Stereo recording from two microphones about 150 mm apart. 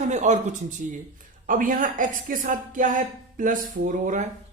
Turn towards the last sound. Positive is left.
turn(degrees=-55)  # may be behind; listen again after turning